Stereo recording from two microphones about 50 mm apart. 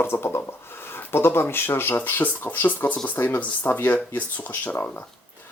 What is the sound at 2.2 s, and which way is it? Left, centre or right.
Speech, left.